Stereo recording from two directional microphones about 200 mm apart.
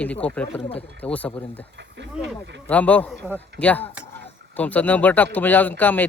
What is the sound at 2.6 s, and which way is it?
Speech, 10° left (ahead or behind).